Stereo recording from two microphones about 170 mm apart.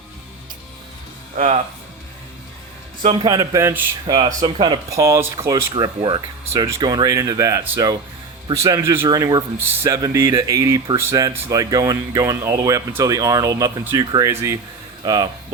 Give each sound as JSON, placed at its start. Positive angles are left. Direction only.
{"t": 1.4, "sound": "speech", "side_deg": -45}
{"t": 3.2, "sound": "a man's voice", "side_deg": -20}
{"t": 4.0, "sound": "a man's voice", "side_deg": -30}